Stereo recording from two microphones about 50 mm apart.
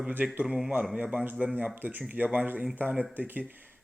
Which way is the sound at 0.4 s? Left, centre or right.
Centre.